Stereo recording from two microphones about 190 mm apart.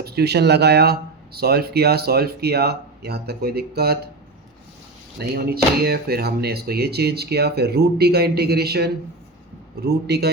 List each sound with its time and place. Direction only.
0.0 s speech: 60° right (ahead or behind)
5.2 s speech: 55° right (ahead or behind)